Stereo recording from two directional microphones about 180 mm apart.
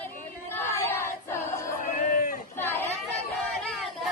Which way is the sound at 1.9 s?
50° left (ahead or behind).